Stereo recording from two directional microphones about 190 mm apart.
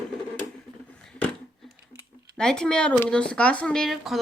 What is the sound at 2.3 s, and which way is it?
Speech, 5° left (ahead or behind).